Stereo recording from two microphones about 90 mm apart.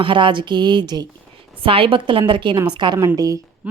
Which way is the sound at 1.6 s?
85° right.